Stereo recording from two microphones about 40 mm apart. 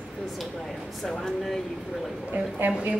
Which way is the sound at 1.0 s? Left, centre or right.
Centre.